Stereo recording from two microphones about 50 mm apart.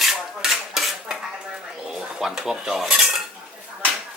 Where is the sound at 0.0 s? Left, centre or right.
Centre.